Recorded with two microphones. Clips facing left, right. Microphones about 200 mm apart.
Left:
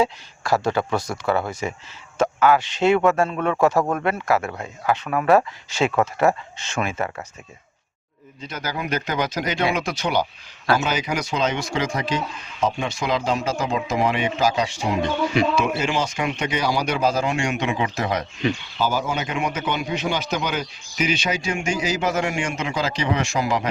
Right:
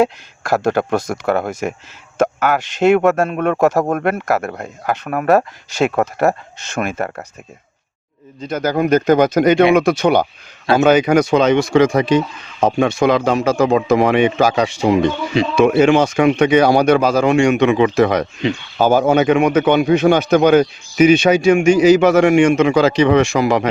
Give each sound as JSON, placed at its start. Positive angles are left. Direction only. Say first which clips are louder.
{"t": 0.0, "sound": "a man's voice", "louder": "right 6 dB", "side_deg": -50}
{"t": 8.4, "sound": "a man's voice", "louder": "right 12 dB", "side_deg": -50}
{"t": 18.8, "sound": "speech", "louder": "right 13 dB", "side_deg": -55}